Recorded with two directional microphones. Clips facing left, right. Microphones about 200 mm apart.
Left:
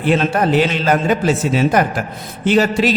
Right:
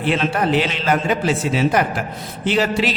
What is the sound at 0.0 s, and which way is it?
A man's voice, 45° left (ahead or behind).